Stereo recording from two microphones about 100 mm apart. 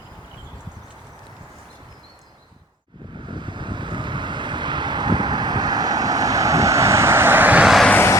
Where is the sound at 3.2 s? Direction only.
50° right (ahead or behind); by 7.7 s 15° right (ahead or behind).